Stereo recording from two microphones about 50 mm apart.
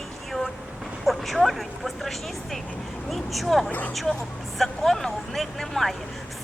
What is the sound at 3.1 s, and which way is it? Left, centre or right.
Speech, centre.